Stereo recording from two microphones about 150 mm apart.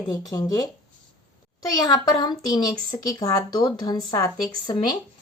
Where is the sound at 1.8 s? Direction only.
30° left (ahead or behind).